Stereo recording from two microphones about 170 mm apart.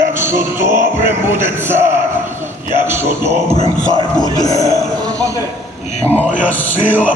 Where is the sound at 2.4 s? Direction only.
15° right (ahead or behind).